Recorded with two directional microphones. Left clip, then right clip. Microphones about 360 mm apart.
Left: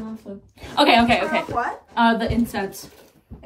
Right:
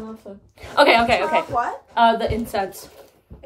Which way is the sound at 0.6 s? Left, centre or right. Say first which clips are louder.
Right 1 dB; centre.